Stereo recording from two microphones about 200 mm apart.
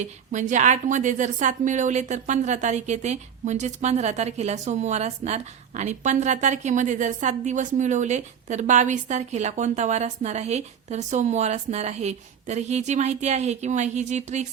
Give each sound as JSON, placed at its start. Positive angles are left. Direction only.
{"t": 0.0, "sound": "a woman's voice", "side_deg": -40}